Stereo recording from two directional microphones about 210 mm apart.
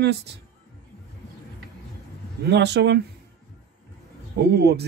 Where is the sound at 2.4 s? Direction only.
55° right (ahead or behind).